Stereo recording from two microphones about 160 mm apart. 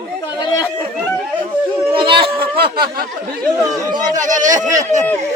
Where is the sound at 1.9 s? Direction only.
30° right (ahead or behind).